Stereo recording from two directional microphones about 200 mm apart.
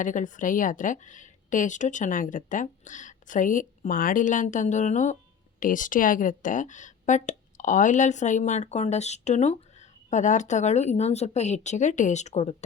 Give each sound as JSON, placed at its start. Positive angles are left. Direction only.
{"t": 0.0, "sound": "a woman's voice", "side_deg": 40}